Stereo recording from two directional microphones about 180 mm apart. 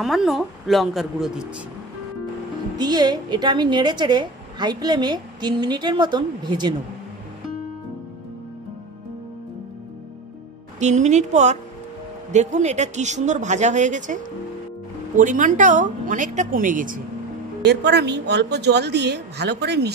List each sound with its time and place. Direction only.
0.0 s a woman's voice: centre (ahead or behind)
2.8 s a woman's voice: 25° right (ahead or behind)
10.8 s a woman's voice: 40° right (ahead or behind)
17.6 s a woman's voice: 70° right (ahead or behind)